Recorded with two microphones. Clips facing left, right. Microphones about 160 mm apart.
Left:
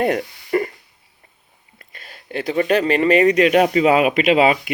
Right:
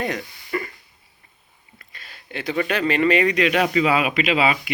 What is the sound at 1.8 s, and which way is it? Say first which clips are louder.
Speech: left 4 dB; 45° left (ahead or behind).